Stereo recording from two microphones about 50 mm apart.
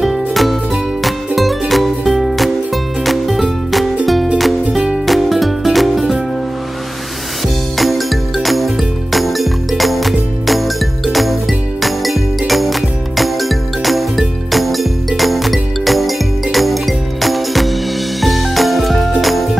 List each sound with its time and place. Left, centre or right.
0.0 s music: centre
4.7 s music: centre
5.0 s music: centre
7.7 s music: centre